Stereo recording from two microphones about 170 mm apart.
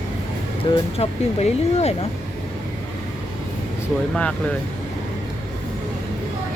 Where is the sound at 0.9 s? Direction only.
40° left (ahead or behind).